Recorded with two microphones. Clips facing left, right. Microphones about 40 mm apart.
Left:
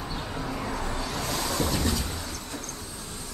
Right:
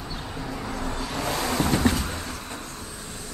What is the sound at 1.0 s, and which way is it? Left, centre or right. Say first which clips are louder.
Vehicle: right 6 dB; centre.